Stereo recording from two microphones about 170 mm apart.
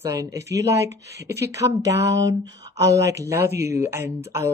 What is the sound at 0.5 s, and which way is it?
Speech, 20° right (ahead or behind).